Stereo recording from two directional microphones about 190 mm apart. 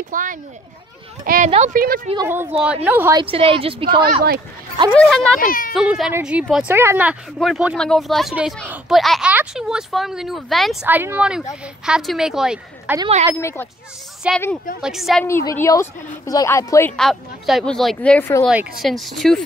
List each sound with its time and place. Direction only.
0.1 s a child's voice: 45° right (ahead or behind)
1.5 s speech: 35° right (ahead or behind)
2.2 s speech: 10° right (ahead or behind)
3.2 s a woman's voice: 30° right (ahead or behind)
4.0 s speech: 50° right (ahead or behind)
4.9 s speech: centre (ahead or behind)
5.4 s a child's voice: 50° left (ahead or behind)
5.8 s speech: 5° right (ahead or behind)
13.4 s a woman's voice: 15° left (ahead or behind)
14.2 s speech: 5° right (ahead or behind)
15.2 s a woman's voice: 15° left (ahead or behind)
16.9 s speech: centre (ahead or behind)
18.5 s speech: 5° right (ahead or behind)